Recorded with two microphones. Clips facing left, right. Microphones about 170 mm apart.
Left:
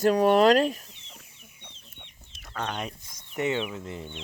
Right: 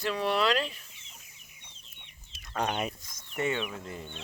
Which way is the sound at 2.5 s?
15° right (ahead or behind).